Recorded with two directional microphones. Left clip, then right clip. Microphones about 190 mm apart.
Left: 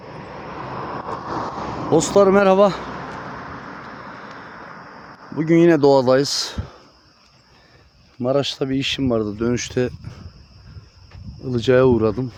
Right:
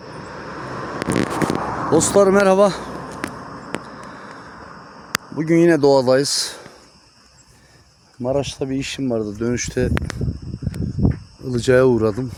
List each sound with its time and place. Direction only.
0.0 s vehicle: 55° right (ahead or behind)
1.6 s a sound: 35° right (ahead or behind)
1.9 s speech: centre (ahead or behind)
2.8 s a sound: 30° left (ahead or behind)
5.4 s speech: 5° left (ahead or behind)
8.2 s speech: 20° left (ahead or behind)
11.4 s speech: centre (ahead or behind)